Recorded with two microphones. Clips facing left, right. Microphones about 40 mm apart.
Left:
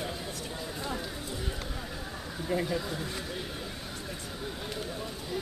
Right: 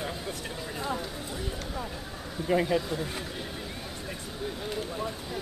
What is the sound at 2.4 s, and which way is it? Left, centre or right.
Speech, right.